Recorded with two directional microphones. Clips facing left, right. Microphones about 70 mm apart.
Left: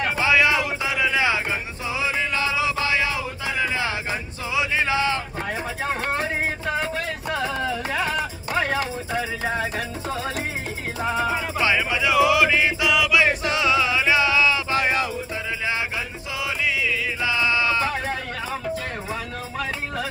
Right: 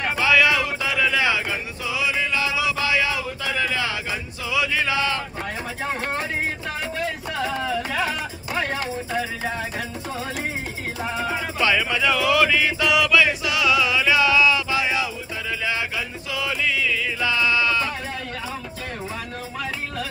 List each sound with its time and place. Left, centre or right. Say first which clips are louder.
0.2 s a sound: right 1 dB; left
5.8 s music: left 1 dB; centre
7.4 s music: right 3 dB; centre
11.5 s music: right 3 dB; left
12.8 s music: right 1 dB; centre
13.3 s music: even; left
14.7 s music: left 1 dB; left
16.3 s music: right 1 dB; centre